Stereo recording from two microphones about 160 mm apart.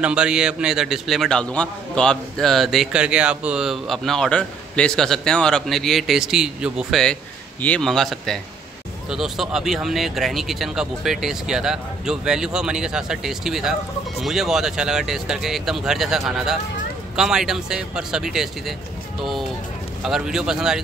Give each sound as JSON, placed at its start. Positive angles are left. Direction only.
{"t": 0.0, "sound": "a man's voice", "side_deg": -5}
{"t": 20.0, "sound": "a man's voice", "side_deg": -5}